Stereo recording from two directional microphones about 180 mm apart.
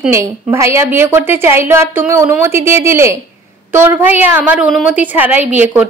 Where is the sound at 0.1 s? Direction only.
15° right (ahead or behind).